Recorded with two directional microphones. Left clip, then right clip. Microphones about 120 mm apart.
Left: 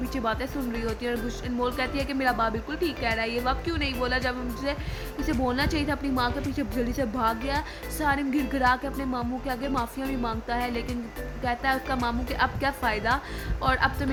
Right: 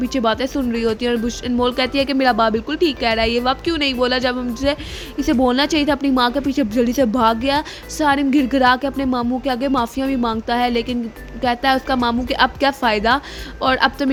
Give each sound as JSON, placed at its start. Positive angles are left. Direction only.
{"t": 0.1, "sound": "speech", "side_deg": -40}